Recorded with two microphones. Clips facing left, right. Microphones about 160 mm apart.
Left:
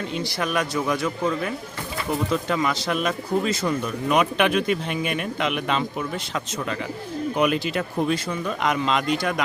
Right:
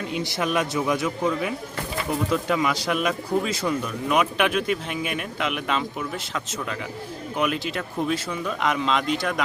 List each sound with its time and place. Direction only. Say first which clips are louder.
0.1 s a man's voice: right 3 dB; 20° right (ahead or behind); by 9.4 s centre (ahead or behind)